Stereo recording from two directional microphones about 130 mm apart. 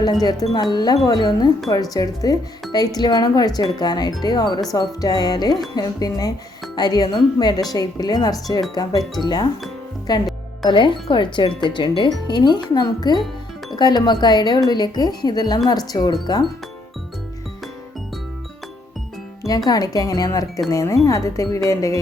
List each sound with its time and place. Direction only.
0.0 s a woman's voice: 30° left (ahead or behind)
19.5 s a woman's voice: 30° left (ahead or behind)